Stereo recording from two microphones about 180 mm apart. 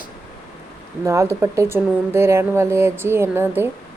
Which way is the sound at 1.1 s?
15° right (ahead or behind).